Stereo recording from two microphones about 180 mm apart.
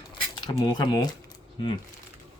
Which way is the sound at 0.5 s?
25° left (ahead or behind).